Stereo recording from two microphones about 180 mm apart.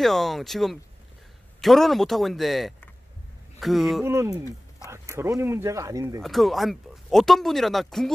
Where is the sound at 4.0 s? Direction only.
15° right (ahead or behind).